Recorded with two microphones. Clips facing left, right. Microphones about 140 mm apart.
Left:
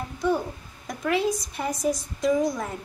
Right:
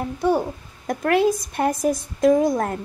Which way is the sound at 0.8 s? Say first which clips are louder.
Right 6 dB; 55° right (ahead or behind).